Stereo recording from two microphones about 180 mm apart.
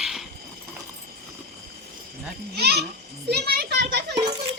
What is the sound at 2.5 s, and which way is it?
A child's voice, 60° right (ahead or behind).